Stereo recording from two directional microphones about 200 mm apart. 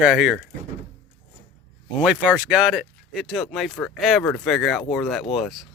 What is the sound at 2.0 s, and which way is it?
Speech, 5° right (ahead or behind).